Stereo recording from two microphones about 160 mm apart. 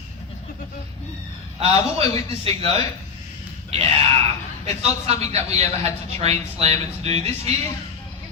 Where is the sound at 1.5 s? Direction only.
40° right (ahead or behind).